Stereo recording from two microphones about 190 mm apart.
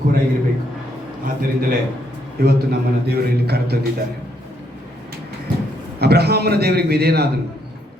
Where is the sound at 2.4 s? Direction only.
55° right (ahead or behind).